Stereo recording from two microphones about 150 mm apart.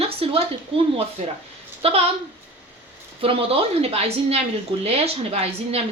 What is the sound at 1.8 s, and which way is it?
Speech, 40° right (ahead or behind).